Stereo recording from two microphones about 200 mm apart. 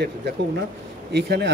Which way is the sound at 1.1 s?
55° right (ahead or behind).